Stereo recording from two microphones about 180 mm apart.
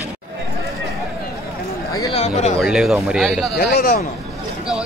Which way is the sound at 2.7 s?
5° right (ahead or behind).